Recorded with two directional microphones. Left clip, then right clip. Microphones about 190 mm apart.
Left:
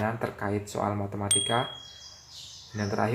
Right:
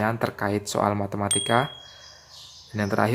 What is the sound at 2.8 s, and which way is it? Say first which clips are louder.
Speech: right 5 dB; 45° right (ahead or behind).